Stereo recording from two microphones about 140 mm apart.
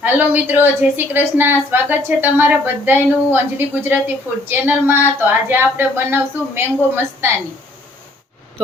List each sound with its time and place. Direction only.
0.0 s a woman's voice: 15° right (ahead or behind)